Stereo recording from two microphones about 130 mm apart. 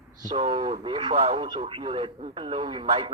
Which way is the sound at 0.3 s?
45° right (ahead or behind).